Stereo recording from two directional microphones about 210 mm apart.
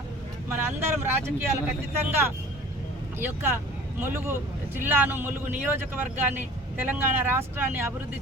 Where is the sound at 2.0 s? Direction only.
10° right (ahead or behind).